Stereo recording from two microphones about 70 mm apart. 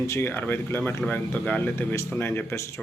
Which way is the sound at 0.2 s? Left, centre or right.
Left.